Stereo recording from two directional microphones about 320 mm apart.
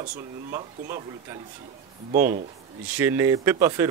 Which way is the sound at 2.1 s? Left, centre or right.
Right.